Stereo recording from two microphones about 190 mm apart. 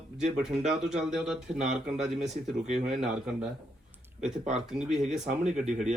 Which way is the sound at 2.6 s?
35° right (ahead or behind).